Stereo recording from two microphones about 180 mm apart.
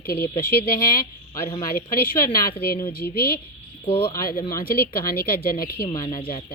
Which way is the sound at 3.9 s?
30° left (ahead or behind).